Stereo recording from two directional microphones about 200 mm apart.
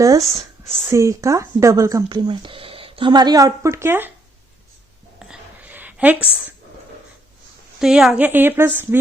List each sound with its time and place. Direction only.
0.0 s speech: 15° right (ahead or behind)
5.2 s a sound: 5° right (ahead or behind)
7.8 s speech: 5° right (ahead or behind)